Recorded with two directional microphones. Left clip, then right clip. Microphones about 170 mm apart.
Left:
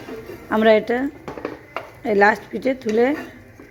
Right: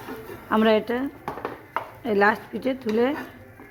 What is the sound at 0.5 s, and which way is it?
Speech, 10° left (ahead or behind).